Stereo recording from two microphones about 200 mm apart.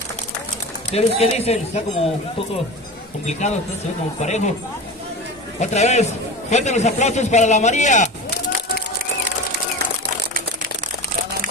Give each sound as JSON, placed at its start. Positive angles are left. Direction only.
{"t": 0.9, "sound": "a man's voice", "side_deg": 30}
{"t": 3.3, "sound": "a man's voice", "side_deg": 35}
{"t": 5.6, "sound": "a man's voice", "side_deg": 35}